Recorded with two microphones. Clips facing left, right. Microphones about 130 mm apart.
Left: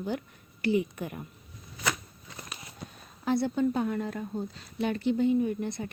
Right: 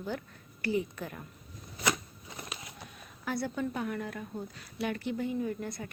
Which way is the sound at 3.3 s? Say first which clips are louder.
Left 7 dB; 25° left (ahead or behind).